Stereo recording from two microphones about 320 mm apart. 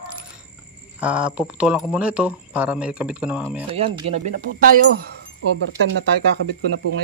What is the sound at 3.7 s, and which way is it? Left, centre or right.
Speech, centre.